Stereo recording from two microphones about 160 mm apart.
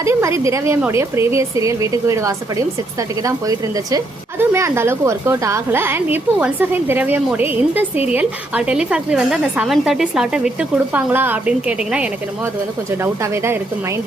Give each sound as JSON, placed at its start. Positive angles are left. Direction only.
{"t": 0.0, "sound": "a woman's voice", "side_deg": -15}
{"t": 13.0, "sound": "a woman's voice", "side_deg": -15}